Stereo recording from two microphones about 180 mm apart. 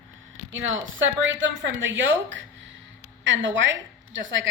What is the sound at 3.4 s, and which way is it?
A woman's voice, 90° right.